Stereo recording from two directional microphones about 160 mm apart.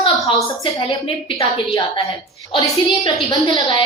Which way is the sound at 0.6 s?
30° left (ahead or behind).